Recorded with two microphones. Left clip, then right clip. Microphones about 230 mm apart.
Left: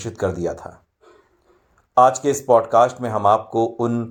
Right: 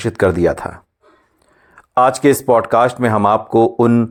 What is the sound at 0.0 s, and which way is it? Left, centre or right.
Speech, right.